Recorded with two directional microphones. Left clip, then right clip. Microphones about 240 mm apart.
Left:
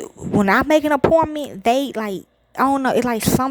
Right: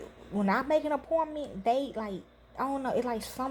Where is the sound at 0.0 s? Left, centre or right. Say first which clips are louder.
Left 14 dB; left.